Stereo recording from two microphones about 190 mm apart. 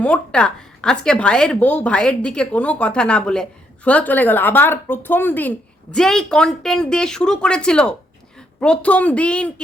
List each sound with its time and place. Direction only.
0.0 s a woman's voice: 5° left (ahead or behind)